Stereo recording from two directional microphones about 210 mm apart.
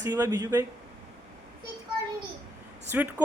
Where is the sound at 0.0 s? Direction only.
20° right (ahead or behind).